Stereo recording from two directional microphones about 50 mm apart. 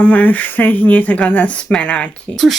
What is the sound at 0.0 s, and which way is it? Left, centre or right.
Speech, left.